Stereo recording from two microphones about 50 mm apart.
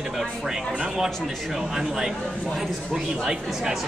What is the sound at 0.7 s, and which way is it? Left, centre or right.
Speech, centre.